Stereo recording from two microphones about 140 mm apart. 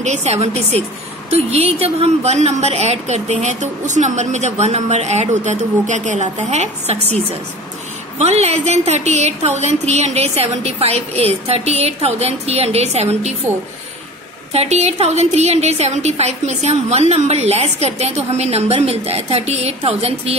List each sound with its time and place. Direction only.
0.0 s a woman's voice: 55° right (ahead or behind)
8.2 s a woman's voice: 50° right (ahead or behind)
14.5 s a woman's voice: 50° right (ahead or behind)